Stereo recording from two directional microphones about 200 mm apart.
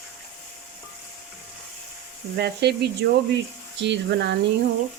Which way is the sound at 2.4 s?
55° right (ahead or behind).